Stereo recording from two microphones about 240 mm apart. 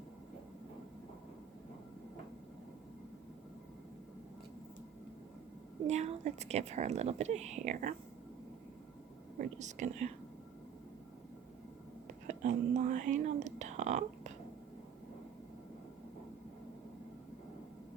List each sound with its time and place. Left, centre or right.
5.9 s a woman's voice: right
9.4 s a woman's voice: right
12.3 s speech: right